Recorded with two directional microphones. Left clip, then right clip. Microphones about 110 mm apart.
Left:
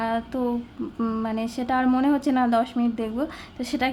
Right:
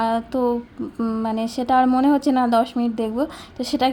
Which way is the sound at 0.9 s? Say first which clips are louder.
Right 4 dB; 20° right (ahead or behind).